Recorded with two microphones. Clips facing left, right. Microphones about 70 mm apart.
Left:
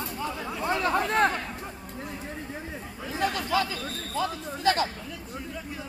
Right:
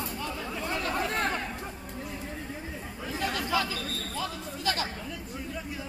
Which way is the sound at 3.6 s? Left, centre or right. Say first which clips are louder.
Even; left.